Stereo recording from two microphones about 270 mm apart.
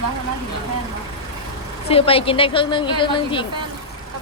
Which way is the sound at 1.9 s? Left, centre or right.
Left.